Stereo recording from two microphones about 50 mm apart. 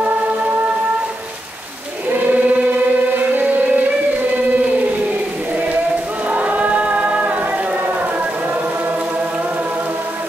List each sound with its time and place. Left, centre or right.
2.0 s choir: right
6.2 s choir: right